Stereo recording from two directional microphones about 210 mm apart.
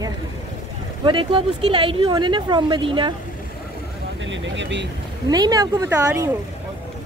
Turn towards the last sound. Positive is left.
turn(degrees=-15)  # may be behind; listen again after turning